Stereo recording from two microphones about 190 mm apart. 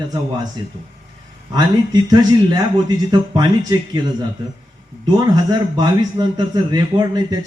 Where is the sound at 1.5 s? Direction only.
20° right (ahead or behind).